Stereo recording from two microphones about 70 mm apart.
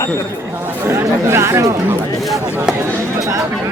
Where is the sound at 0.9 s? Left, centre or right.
Right.